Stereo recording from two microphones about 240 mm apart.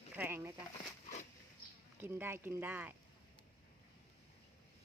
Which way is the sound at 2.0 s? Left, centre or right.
Centre.